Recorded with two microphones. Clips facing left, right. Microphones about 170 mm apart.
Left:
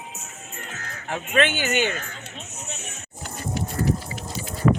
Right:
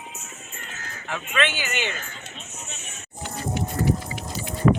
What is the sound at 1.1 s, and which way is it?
Speech, 45° left (ahead or behind).